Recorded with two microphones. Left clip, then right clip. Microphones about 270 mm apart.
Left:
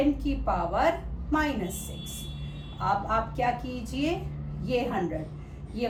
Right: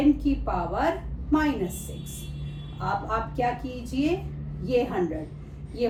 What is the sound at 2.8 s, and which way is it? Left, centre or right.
Speech, centre.